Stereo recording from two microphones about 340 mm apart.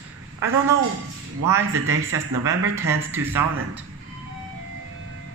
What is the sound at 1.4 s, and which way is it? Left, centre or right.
Speech, centre.